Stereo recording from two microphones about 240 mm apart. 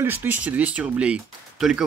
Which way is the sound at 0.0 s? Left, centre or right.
Centre.